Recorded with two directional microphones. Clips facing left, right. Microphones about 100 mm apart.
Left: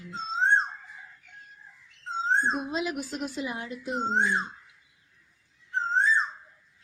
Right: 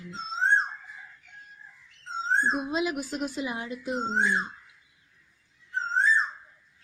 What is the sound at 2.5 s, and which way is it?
A woman's voice, 10° right (ahead or behind).